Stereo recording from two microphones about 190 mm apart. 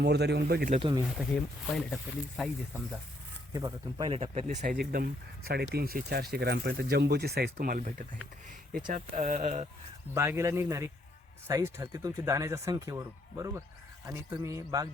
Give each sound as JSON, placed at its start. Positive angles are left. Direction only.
{"t": 0.0, "sound": "speech", "side_deg": -60}
{"t": 0.8, "sound": "speech", "side_deg": -25}
{"t": 1.2, "sound": "speech", "side_deg": 0}
{"t": 3.5, "sound": "speech", "side_deg": -20}
{"t": 10.2, "sound": "speech", "side_deg": -15}